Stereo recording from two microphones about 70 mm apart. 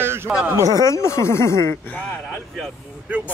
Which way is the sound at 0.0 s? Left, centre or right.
Right.